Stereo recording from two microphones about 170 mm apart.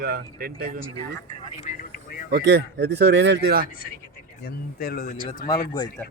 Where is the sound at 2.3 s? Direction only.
80° right.